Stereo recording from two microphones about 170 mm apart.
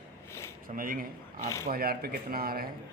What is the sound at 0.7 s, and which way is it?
A man's voice, 55° right (ahead or behind).